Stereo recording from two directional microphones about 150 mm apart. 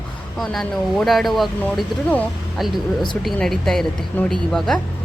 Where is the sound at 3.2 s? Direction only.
Centre (ahead or behind).